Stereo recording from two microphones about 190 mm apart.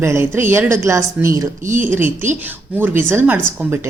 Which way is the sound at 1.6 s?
45° right (ahead or behind).